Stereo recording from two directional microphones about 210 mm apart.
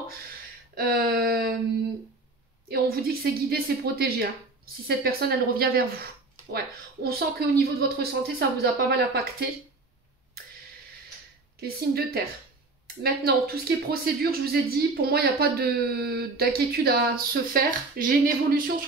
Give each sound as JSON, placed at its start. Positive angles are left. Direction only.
{"t": 0.7, "sound": "speech", "side_deg": -45}
{"t": 2.7, "sound": "speech", "side_deg": -45}
{"t": 11.6, "sound": "speech", "side_deg": -45}